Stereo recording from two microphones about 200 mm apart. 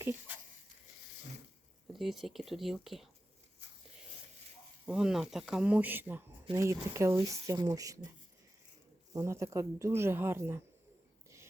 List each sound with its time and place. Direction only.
1.9 s speech: centre (ahead or behind)
4.9 s speech: 5° right (ahead or behind)
9.1 s speech: 15° right (ahead or behind)